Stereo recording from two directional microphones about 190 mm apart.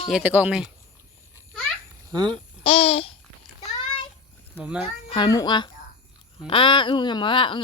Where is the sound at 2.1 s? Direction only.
20° right (ahead or behind).